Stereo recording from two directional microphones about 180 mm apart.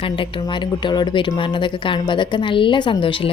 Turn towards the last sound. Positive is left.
turn(degrees=30)  # may be behind; listen again after turning